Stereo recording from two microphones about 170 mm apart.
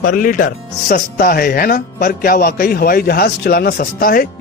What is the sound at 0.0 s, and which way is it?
Speech, 55° left (ahead or behind).